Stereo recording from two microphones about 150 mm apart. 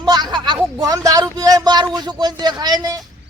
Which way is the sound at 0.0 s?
30° right (ahead or behind).